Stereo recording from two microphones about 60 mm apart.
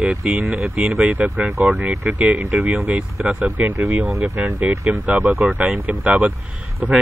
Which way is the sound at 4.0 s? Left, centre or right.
Centre.